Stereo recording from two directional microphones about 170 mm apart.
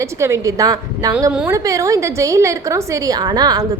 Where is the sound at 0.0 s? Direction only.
15° right (ahead or behind).